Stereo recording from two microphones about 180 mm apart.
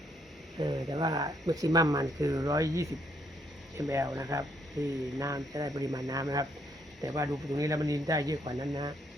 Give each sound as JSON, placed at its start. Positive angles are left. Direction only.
{"t": 0.6, "sound": "speech", "side_deg": -25}